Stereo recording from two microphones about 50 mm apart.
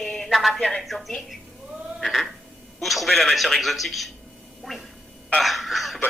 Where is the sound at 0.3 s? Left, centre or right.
Centre.